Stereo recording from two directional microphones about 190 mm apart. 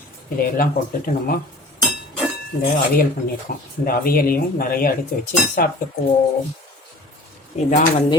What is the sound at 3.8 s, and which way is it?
Speech, 50° left (ahead or behind).